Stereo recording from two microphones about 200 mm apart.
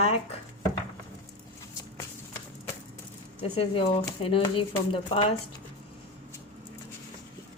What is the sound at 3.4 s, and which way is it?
A woman's voice, 30° left (ahead or behind).